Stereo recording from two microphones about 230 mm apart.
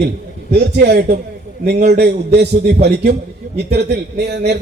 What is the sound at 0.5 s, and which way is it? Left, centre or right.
Speech, right.